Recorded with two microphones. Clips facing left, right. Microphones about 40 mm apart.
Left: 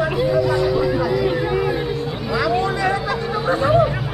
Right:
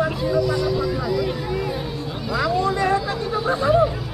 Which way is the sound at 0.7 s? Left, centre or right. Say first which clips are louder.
Left 4 dB; centre.